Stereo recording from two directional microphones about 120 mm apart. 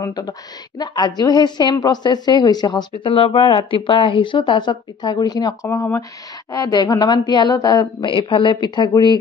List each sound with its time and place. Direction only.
0.0 s a woman's voice: 30° left (ahead or behind)
3.1 s a woman's voice: 50° left (ahead or behind)